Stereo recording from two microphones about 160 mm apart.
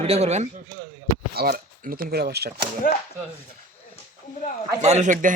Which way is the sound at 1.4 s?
70° right (ahead or behind).